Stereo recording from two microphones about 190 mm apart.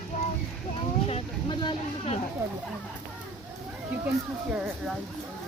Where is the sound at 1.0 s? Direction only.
30° left (ahead or behind).